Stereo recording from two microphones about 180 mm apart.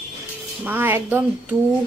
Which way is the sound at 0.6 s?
10° right (ahead or behind).